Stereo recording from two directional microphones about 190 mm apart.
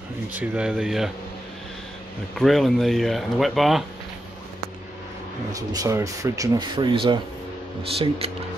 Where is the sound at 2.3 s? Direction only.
Centre (ahead or behind).